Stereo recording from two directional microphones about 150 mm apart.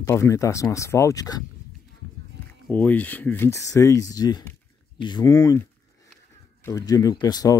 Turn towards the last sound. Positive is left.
turn(degrees=25)  # may be behind; listen again after turning